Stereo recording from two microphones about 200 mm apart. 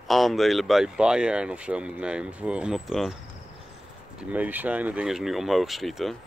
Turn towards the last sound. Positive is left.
turn(degrees=0)  # may be behind; listen again after turning